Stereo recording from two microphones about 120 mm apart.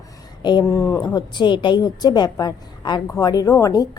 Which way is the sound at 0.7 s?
25° left (ahead or behind).